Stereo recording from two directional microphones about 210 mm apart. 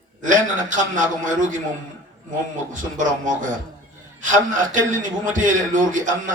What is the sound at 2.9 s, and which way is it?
A man's voice, 40° right (ahead or behind).